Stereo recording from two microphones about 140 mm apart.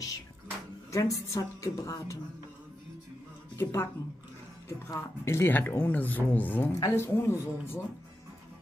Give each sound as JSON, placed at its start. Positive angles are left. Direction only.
{"t": 0.9, "sound": "a woman's voice", "side_deg": 25}
{"t": 3.5, "sound": "a woman's voice", "side_deg": 20}